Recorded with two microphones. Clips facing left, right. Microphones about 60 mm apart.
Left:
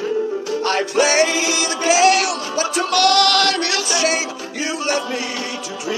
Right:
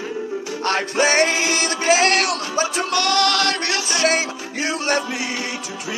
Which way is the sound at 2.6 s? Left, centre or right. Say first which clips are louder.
Left 5 dB; right.